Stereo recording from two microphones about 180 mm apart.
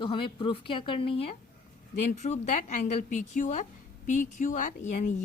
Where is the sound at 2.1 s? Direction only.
40° left (ahead or behind).